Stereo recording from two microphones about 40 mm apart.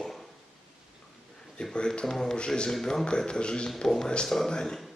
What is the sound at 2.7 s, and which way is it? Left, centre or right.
A man's voice, centre.